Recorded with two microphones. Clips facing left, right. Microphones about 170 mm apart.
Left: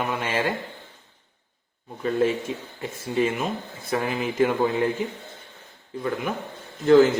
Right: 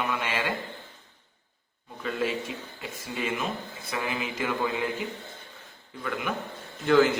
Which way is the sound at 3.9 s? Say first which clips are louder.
Left 7 dB; 45° left (ahead or behind).